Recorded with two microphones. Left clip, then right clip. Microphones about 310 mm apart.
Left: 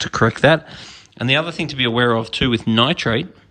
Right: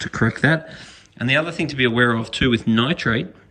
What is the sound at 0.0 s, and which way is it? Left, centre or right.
A man's voice, centre.